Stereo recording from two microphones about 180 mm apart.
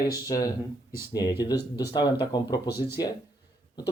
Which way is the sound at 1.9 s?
25° left (ahead or behind).